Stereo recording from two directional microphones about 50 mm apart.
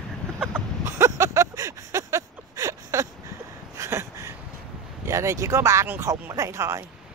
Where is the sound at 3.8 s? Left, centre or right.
Right.